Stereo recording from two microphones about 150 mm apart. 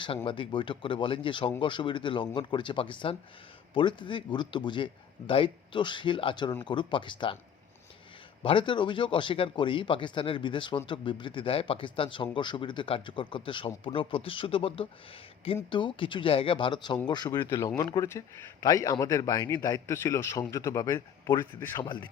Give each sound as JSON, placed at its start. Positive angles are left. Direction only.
{"t": 0.3, "sound": "speech", "side_deg": 35}
{"t": 8.4, "sound": "a man's voice", "side_deg": 35}
{"t": 17.4, "sound": "a man's voice", "side_deg": 20}